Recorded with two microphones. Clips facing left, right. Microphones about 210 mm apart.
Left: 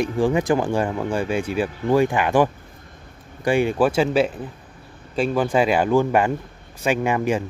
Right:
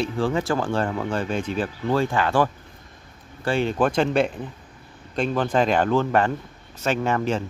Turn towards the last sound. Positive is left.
turn(degrees=10)  # may be behind; listen again after turning